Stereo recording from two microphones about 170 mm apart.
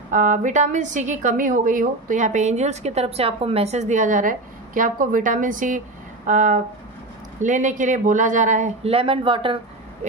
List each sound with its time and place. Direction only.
0.1 s a woman's voice: 50° right (ahead or behind); by 9.6 s 30° right (ahead or behind)